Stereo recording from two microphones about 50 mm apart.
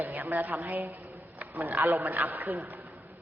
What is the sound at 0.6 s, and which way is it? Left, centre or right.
Speech, right.